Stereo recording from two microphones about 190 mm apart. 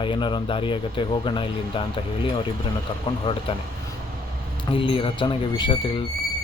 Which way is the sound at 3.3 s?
25° left (ahead or behind).